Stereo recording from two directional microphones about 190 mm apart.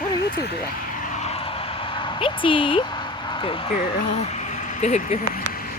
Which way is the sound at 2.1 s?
25° left (ahead or behind).